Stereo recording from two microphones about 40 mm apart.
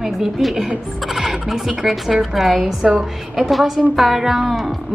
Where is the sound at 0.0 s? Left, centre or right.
Centre.